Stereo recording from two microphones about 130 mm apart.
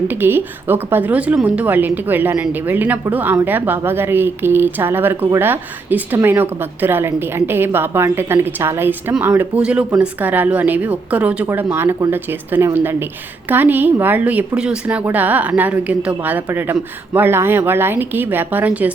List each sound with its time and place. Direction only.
0.1 s a woman's voice: 15° right (ahead or behind)